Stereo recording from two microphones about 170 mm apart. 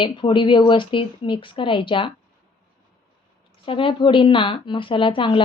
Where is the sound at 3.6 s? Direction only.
30° left (ahead or behind).